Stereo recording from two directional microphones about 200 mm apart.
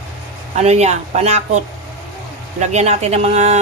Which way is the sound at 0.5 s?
35° right (ahead or behind).